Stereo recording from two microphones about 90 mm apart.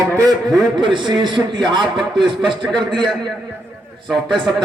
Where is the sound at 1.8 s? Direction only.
Centre (ahead or behind).